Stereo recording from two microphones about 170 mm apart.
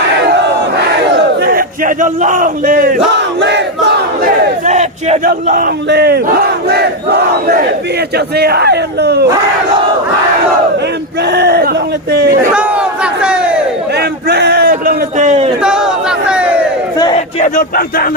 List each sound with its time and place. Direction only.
1.4 s speech: 60° right (ahead or behind)
3.2 s battle cry: 90° right
4.6 s battle cry: 45° right (ahead or behind)
5.3 s crowd: 60° right (ahead or behind); by 9.2 s 75° right (ahead or behind)
11.2 s crowd: 75° right (ahead or behind)
12.5 s battle cry: 5° right (ahead or behind)
13.9 s a sound: 70° right (ahead or behind)
15.2 s a sound: 40° right (ahead or behind)
15.6 s a sound: 5° right (ahead or behind)
17.2 s speech: 50° left (ahead or behind)